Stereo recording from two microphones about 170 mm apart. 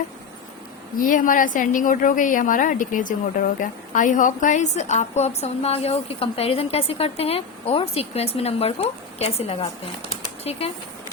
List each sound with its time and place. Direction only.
0.9 s a woman's voice: 55° left (ahead or behind); by 10.7 s 35° left (ahead or behind)